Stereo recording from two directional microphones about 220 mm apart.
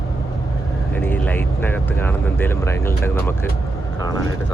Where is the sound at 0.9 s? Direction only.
10° left (ahead or behind).